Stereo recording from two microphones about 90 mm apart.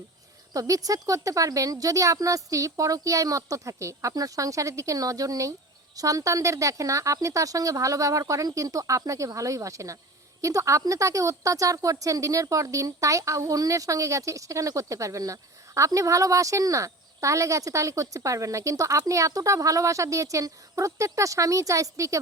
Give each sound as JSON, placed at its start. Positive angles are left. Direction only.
{"t": 0.5, "sound": "a woman's voice", "side_deg": -40}